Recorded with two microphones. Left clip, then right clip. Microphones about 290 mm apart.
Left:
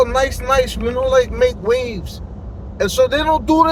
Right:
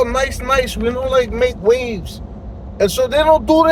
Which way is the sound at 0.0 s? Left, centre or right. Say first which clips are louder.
Left 1 dB; centre.